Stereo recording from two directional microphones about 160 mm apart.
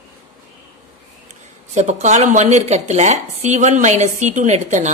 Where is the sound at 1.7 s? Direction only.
45° right (ahead or behind).